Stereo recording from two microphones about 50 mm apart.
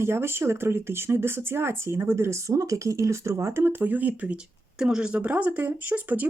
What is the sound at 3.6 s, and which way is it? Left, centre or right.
Speech, right.